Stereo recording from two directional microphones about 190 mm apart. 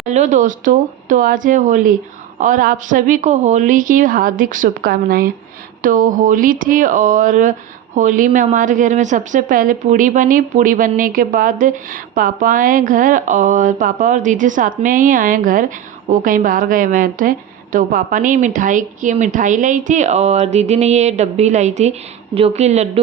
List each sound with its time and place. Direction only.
0.1 s a woman's voice: 40° right (ahead or behind)